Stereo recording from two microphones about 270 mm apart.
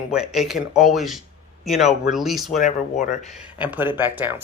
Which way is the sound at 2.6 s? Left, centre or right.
Left.